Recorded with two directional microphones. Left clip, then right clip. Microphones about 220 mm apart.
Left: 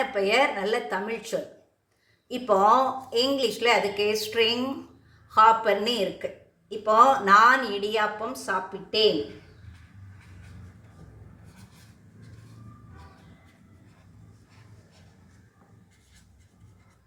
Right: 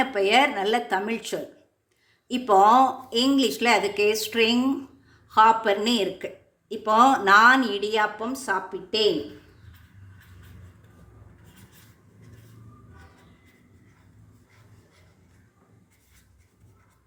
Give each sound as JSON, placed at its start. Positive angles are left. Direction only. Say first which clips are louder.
{"t": 0.0, "sound": "speech", "louder": "right 3 dB", "side_deg": -40}